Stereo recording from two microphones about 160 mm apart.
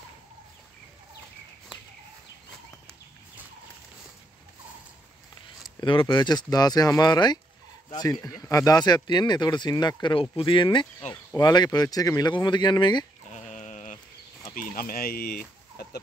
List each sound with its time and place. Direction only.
5.8 s speech: 30° left (ahead or behind)
13.3 s sheep: 45° left (ahead or behind)
14.5 s speech: 60° left (ahead or behind)